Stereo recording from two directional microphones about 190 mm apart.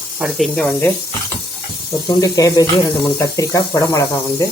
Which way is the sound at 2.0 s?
20° left (ahead or behind).